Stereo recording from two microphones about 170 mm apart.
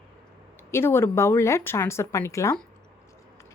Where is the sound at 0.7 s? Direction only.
15° left (ahead or behind).